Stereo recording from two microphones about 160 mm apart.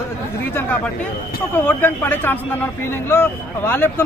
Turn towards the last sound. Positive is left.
turn(degrees=15)  # may be behind; listen again after turning